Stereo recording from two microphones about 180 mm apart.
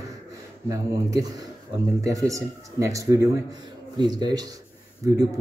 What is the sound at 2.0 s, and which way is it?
A man's voice, 20° right (ahead or behind).